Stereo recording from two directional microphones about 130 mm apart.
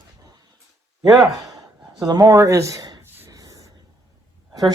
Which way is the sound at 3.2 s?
25° right (ahead or behind).